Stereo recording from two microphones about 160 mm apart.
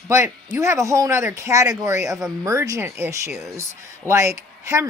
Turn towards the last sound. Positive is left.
turn(degrees=-20)  # may be behind; listen again after turning